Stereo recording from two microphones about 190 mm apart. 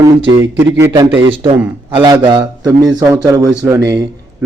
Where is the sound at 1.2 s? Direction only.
30° right (ahead or behind).